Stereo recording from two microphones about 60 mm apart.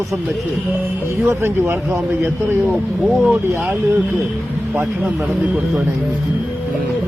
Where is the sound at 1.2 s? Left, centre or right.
Right.